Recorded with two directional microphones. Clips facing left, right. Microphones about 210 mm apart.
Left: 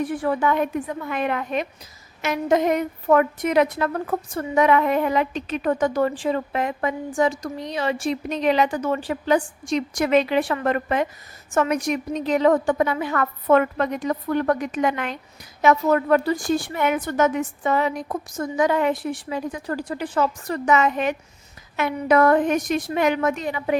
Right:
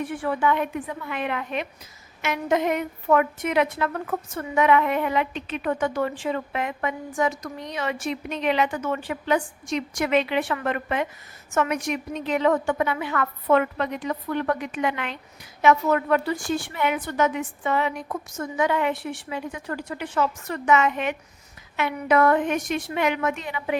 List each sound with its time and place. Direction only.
0.0 s a woman's voice: 35° left (ahead or behind)